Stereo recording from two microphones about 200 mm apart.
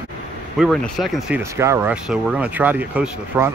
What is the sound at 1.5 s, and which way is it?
Speech, 15° right (ahead or behind).